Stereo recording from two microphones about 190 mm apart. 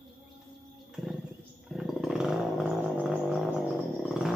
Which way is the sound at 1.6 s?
Centre (ahead or behind).